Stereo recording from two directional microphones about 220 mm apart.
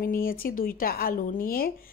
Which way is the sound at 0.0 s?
40° left (ahead or behind).